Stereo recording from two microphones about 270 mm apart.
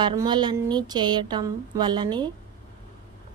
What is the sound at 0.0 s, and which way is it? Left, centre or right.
A woman's voice, centre.